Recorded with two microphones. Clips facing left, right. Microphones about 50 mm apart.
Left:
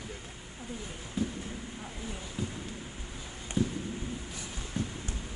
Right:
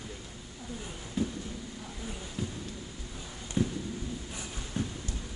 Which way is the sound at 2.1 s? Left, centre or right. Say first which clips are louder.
Right 1 dB; left.